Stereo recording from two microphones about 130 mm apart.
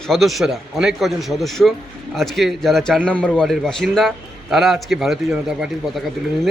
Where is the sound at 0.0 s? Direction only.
Centre (ahead or behind).